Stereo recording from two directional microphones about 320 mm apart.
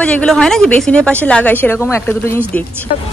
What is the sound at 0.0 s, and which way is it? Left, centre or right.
Speech, centre.